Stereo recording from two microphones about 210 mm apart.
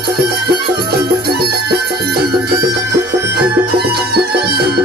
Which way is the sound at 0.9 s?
50° right (ahead or behind).